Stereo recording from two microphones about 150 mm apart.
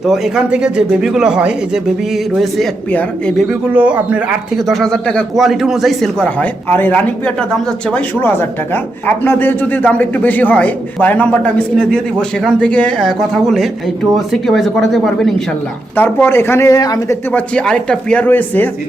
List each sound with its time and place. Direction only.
0.0 s speech: 5° right (ahead or behind)
3.7 s speech: 10° right (ahead or behind)
16.0 s speech: 15° left (ahead or behind)
17.3 s speech: 5° left (ahead or behind)